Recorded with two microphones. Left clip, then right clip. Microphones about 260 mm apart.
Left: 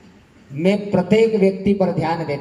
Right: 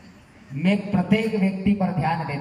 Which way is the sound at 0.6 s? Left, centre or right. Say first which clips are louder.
Left 7 dB; centre.